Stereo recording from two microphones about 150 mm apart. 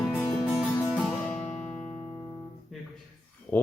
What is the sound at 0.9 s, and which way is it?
Music, centre (ahead or behind).